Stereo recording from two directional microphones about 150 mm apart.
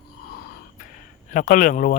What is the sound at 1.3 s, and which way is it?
Speech, 65° left (ahead or behind).